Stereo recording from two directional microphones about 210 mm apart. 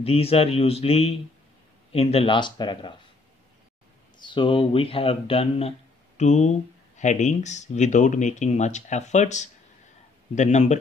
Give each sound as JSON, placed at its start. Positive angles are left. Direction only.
{"t": 0.0, "sound": "speech", "side_deg": 30}
{"t": 4.2, "sound": "speech", "side_deg": 25}